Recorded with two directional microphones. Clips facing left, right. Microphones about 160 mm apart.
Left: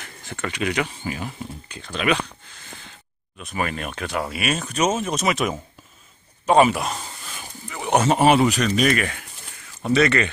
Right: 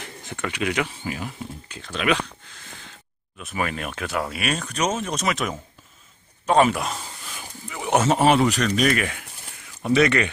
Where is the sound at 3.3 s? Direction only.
Centre (ahead or behind).